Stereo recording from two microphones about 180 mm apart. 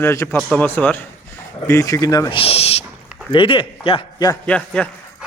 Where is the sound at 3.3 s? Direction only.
30° left (ahead or behind).